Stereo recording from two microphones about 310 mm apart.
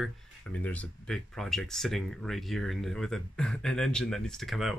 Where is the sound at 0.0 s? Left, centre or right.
Centre.